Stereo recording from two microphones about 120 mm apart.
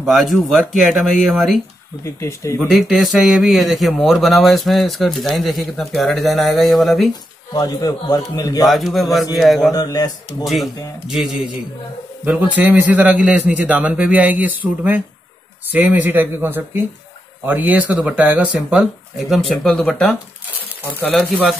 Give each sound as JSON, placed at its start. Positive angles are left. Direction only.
{"t": 0.0, "sound": "speech", "side_deg": 0}
{"t": 2.0, "sound": "speech", "side_deg": 25}
{"t": 2.7, "sound": "speech", "side_deg": 0}
{"t": 7.5, "sound": "a man's voice", "side_deg": 30}
{"t": 8.6, "sound": "speech", "side_deg": 0}
{"t": 9.7, "sound": "a man's voice", "side_deg": 30}
{"t": 10.4, "sound": "speech", "side_deg": 0}
{"t": 12.3, "sound": "a man's voice", "side_deg": -15}